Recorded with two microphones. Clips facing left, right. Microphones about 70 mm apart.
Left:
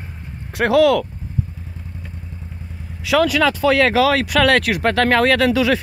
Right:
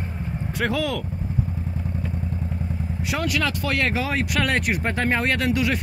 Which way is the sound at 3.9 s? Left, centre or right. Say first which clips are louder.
Left 9 dB; left.